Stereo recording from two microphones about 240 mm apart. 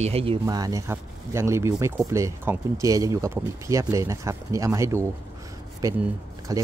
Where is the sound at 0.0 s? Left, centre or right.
Right.